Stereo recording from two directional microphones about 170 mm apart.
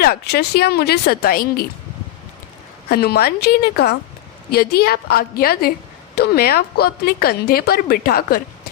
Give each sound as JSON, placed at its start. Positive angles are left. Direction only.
{"t": 0.0, "sound": "speech", "side_deg": 65}
{"t": 2.9, "sound": "a woman's voice", "side_deg": 65}